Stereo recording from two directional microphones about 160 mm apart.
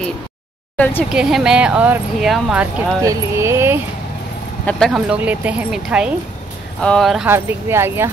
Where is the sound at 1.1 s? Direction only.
5° right (ahead or behind).